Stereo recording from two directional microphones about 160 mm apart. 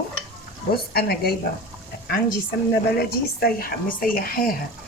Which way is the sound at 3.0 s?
70° left (ahead or behind).